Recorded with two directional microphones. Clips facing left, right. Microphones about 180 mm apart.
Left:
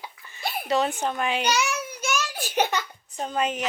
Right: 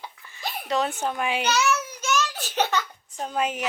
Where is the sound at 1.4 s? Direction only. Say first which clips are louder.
Right 2 dB; 15° left (ahead or behind).